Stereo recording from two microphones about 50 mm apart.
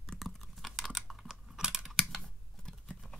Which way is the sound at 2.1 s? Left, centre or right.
Centre.